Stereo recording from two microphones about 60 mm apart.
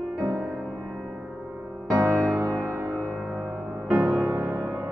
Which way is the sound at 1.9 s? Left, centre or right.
Right.